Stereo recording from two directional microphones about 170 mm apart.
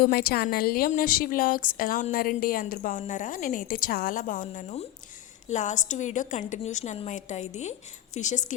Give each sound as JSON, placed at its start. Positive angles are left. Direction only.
{"t": 0.0, "sound": "a woman's voice", "side_deg": 65}